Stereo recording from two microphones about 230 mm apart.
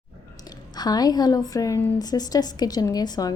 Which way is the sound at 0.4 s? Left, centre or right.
Centre.